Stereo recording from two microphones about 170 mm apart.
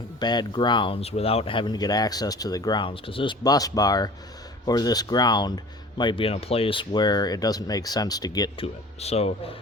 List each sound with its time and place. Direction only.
0.2 s speech: 25° left (ahead or behind)
8.6 s speech: 40° left (ahead or behind)